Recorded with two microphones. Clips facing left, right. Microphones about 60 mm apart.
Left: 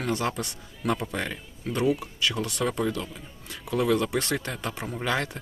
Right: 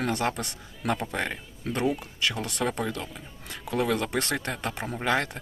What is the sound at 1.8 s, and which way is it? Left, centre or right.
Speech, centre.